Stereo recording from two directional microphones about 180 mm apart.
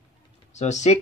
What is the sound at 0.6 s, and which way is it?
Speech, 40° left (ahead or behind).